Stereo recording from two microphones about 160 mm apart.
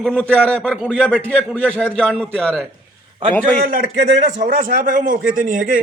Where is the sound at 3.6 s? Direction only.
65° right (ahead or behind).